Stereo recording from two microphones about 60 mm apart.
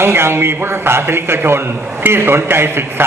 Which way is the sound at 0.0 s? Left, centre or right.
Right.